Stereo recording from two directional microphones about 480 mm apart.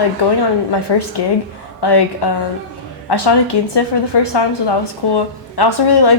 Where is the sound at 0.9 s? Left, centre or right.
Left.